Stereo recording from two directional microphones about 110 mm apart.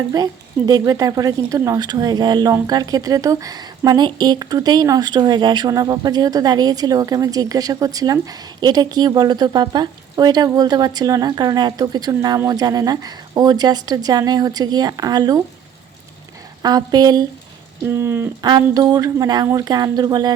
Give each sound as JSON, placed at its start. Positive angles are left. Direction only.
{"t": 0.1, "sound": "speech", "side_deg": -35}
{"t": 16.6, "sound": "speech", "side_deg": -40}
{"t": 17.8, "sound": "speech", "side_deg": -20}
{"t": 18.4, "sound": "speech", "side_deg": -35}